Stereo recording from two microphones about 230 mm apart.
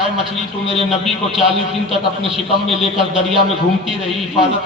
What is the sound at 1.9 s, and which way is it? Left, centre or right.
Speech, right.